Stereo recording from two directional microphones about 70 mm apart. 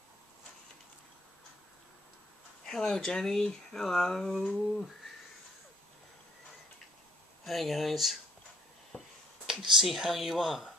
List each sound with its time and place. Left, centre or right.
2.6 s speech: centre
7.4 s speech: centre
8.9 s finger snapping: centre
9.8 s speech: centre